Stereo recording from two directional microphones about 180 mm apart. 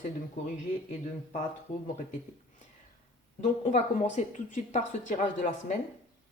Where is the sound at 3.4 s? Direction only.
40° left (ahead or behind).